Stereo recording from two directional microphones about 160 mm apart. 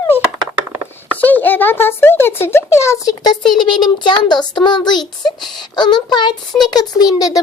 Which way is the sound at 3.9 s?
30° left (ahead or behind).